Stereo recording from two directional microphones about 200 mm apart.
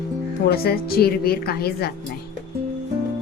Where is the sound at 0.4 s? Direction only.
50° left (ahead or behind).